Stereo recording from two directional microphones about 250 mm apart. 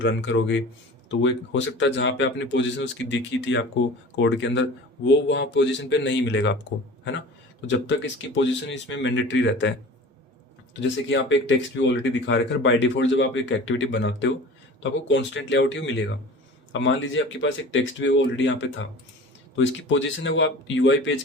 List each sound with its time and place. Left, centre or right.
0.0 s speech: left
7.7 s speech: left
10.8 s speech: left